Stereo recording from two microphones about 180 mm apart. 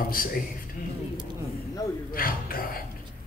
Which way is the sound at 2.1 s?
55° left (ahead or behind).